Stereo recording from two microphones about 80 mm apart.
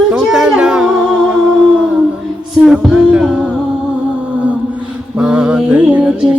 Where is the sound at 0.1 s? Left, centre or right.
Centre.